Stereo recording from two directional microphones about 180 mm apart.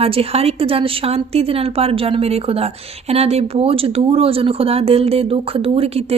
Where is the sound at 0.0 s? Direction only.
30° right (ahead or behind).